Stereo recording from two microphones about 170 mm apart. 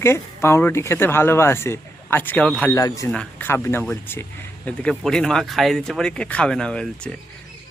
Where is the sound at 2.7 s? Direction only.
20° left (ahead or behind).